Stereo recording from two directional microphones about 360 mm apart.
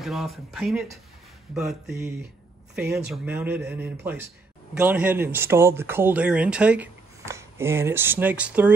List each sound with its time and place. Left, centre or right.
0.0 s speech: centre